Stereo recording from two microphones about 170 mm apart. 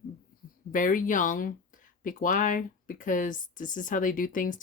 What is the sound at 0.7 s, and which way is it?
Speech, 50° left (ahead or behind).